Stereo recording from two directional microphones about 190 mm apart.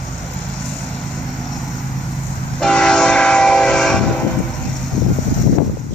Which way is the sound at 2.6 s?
5° left (ahead or behind).